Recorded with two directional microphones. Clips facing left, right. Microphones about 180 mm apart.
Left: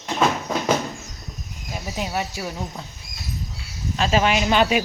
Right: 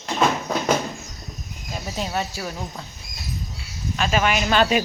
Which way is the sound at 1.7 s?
10° left (ahead or behind).